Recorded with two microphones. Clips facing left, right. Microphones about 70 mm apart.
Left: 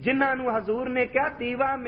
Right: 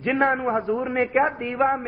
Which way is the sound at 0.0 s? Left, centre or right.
Right.